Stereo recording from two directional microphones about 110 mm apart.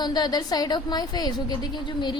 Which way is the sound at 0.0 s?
40° left (ahead or behind).